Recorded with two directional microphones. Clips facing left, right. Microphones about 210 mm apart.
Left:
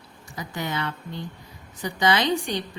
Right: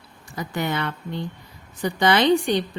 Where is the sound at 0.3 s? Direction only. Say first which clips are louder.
Right 4 dB; 60° right (ahead or behind).